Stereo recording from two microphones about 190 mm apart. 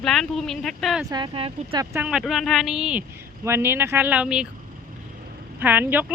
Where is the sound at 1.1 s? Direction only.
25° right (ahead or behind).